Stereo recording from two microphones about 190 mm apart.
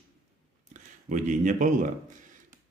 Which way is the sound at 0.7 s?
40° right (ahead or behind).